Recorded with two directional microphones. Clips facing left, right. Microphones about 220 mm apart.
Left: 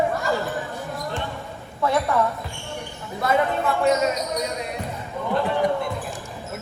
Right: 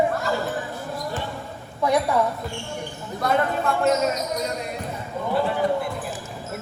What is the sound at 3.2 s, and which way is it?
Speech, centre (ahead or behind).